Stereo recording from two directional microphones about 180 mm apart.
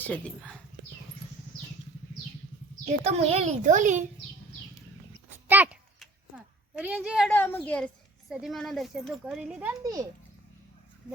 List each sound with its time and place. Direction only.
0.0 s speech: 5° left (ahead or behind)
3.0 s a child's voice: 35° right (ahead or behind)
5.5 s a child's voice: 10° right (ahead or behind)
6.0 s a sound: 5° right (ahead or behind)
7.3 s speech: 10° left (ahead or behind); by 9.7 s 5° right (ahead or behind)
9.8 s a child's voice: 20° right (ahead or behind)